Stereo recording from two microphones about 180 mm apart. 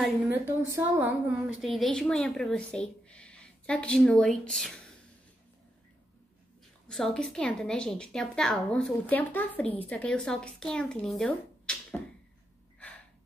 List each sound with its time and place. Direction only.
0.6 s a woman's voice: 10° right (ahead or behind); by 4.8 s 5° left (ahead or behind)
6.9 s a woman's voice: 5° left (ahead or behind)